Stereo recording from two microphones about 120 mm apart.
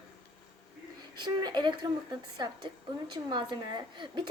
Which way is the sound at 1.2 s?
40° right (ahead or behind).